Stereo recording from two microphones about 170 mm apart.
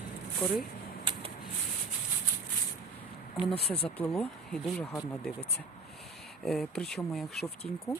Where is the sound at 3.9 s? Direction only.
10° left (ahead or behind).